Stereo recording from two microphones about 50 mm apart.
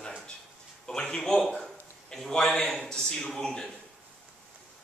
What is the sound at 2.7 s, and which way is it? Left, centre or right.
Speech, centre.